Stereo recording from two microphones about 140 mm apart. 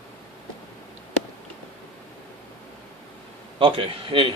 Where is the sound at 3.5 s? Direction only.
40° right (ahead or behind).